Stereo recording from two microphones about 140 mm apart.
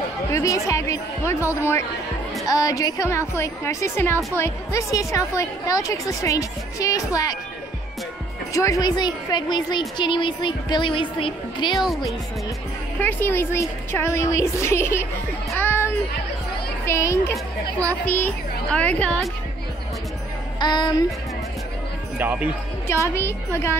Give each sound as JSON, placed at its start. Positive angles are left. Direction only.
{"t": 0.3, "sound": "a woman's voice", "side_deg": 20}
{"t": 8.5, "sound": "a woman's voice", "side_deg": 25}
{"t": 11.7, "sound": "speech", "side_deg": 0}
{"t": 13.0, "sound": "a woman's voice", "side_deg": 15}
{"t": 20.5, "sound": "speech", "side_deg": 30}
{"t": 22.2, "sound": "speech", "side_deg": -10}
{"t": 22.8, "sound": "a woman's voice", "side_deg": 20}